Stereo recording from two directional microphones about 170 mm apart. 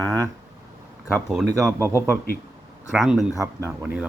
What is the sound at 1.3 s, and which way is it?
Speech, centre (ahead or behind).